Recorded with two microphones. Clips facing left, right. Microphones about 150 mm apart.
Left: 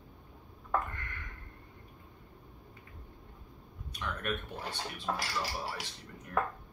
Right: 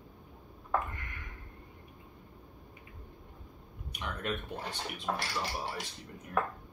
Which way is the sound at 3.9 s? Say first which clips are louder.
Even; 20° right (ahead or behind).